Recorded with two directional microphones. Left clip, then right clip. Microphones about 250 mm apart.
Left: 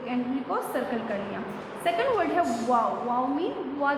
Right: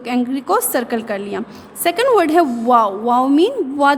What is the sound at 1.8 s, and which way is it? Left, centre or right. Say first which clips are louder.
A woman's voice: right 11 dB; right.